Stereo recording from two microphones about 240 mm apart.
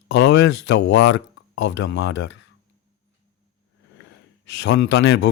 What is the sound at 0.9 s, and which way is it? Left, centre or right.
Speech, left.